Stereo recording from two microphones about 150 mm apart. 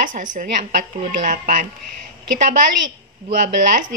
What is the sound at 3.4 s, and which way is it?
Speech, 60° right (ahead or behind).